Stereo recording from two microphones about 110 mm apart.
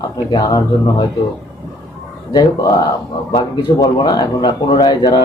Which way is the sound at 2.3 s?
35° left (ahead or behind).